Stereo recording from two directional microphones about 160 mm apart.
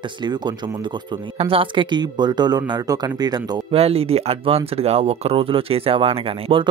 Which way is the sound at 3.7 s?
40° right (ahead or behind).